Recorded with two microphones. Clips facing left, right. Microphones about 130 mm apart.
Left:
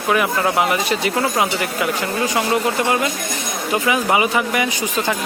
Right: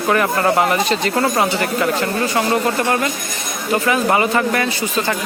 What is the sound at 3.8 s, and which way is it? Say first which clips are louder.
Speech: right 1 dB; 10° left (ahead or behind).